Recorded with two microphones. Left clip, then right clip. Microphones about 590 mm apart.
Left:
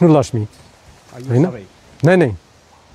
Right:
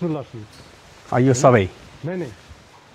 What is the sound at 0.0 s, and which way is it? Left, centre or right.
Speech, left.